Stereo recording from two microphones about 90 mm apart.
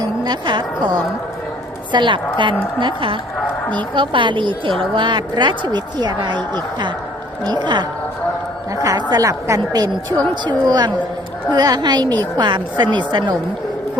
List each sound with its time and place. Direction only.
0.0 s a woman's voice: 55° right (ahead or behind)
8.7 s a woman's voice: 40° right (ahead or behind); by 13.3 s 60° right (ahead or behind)